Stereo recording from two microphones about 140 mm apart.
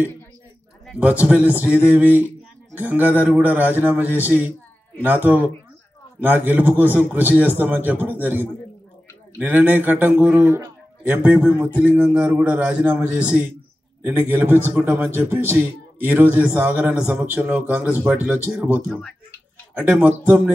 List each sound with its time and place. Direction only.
0.9 s a man's voice: 10° right (ahead or behind)
10.4 s a sound: 15° right (ahead or behind)
11.2 s a man's voice: 10° right (ahead or behind)
18.9 s speech: 5° left (ahead or behind)
19.8 s a man's voice: 10° right (ahead or behind)